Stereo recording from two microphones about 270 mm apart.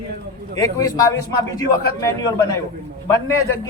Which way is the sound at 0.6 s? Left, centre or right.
Centre.